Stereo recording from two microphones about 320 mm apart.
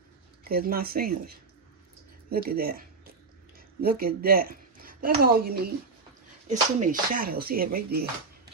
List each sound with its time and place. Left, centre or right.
0.4 s speech: right
2.3 s a woman's voice: right